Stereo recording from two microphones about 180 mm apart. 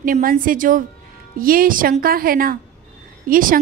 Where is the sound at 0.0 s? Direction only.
50° right (ahead or behind).